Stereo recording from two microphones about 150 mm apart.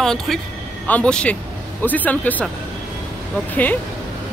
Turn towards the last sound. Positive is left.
turn(degrees=10)  # may be behind; listen again after turning